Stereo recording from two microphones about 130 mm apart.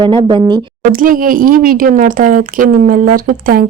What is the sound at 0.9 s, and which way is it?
Speech, 90° right.